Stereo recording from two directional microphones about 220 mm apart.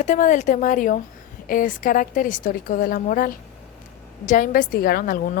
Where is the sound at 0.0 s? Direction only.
35° left (ahead or behind).